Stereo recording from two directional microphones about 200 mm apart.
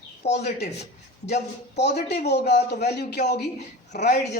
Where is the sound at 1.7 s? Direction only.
55° left (ahead or behind).